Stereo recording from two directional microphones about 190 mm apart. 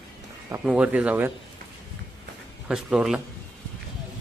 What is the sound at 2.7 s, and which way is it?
Speech, 5° right (ahead or behind).